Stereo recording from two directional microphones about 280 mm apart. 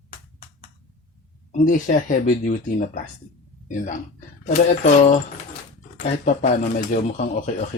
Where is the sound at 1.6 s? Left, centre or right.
Left.